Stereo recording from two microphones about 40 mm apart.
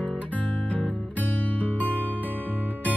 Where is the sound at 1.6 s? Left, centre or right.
Left.